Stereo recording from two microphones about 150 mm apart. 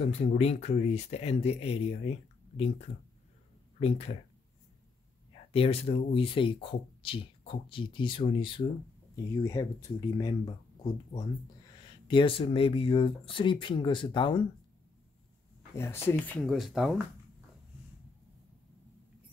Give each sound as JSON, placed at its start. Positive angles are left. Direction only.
{"t": 0.4, "sound": "speech", "side_deg": 45}
{"t": 5.3, "sound": "speech", "side_deg": 40}
{"t": 9.1, "sound": "speech", "side_deg": 20}
{"t": 12.1, "sound": "speech", "side_deg": 35}
{"t": 15.7, "sound": "speech", "side_deg": 15}